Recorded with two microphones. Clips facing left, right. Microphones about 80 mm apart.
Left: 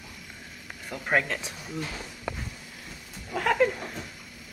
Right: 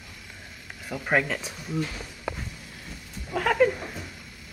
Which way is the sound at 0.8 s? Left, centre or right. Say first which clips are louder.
Right 1 dB; centre.